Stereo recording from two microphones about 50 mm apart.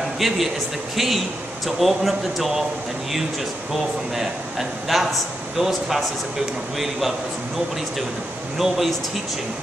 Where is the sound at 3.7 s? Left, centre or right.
Centre.